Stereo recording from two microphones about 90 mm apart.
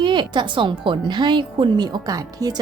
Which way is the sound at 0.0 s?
60° right (ahead or behind).